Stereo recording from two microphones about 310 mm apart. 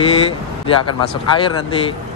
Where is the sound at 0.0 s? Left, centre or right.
Centre.